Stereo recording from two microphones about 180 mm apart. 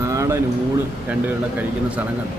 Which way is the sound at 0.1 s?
15° right (ahead or behind).